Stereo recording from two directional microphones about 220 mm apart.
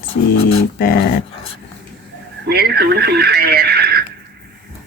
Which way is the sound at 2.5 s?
45° right (ahead or behind).